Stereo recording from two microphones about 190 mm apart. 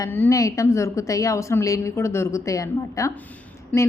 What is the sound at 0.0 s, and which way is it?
A woman's voice, 15° left (ahead or behind).